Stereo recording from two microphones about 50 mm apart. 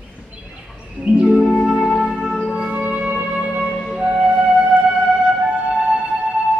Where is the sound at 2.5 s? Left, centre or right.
Centre.